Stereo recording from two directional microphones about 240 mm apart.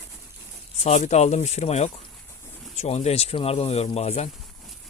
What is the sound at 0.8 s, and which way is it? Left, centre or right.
Speech, left.